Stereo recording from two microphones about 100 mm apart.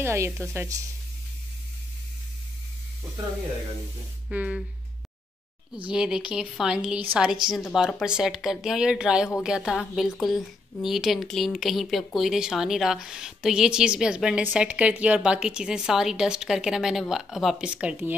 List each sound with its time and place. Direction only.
0.0 s a woman's voice: 25° right (ahead or behind)
4.3 s a woman's voice: 10° right (ahead or behind)
5.9 s a woman's voice: 5° right (ahead or behind)
7.0 s a woman's voice: 20° right (ahead or behind)
7.4 s a woman's voice: centre (ahead or behind)